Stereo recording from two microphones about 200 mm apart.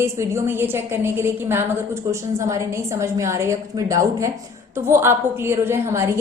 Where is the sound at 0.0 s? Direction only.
15° right (ahead or behind).